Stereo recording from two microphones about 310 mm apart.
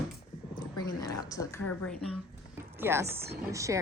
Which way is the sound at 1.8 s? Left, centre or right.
Centre.